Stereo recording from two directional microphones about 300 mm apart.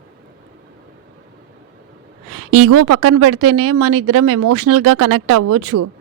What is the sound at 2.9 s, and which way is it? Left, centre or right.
Speech, right.